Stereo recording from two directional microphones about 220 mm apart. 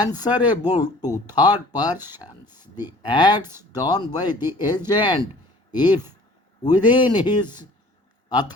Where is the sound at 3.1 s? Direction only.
20° left (ahead or behind).